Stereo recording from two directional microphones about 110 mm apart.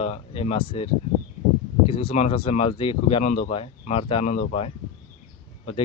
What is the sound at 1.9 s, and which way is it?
Speech, 60° left (ahead or behind).